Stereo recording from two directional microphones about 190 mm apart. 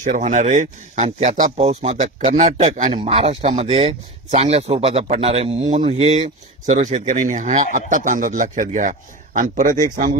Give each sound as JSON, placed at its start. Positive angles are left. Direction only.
{"t": 0.0, "sound": "a man's voice", "side_deg": -40}